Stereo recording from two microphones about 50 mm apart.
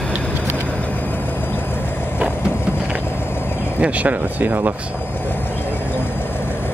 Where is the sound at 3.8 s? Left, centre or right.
Right.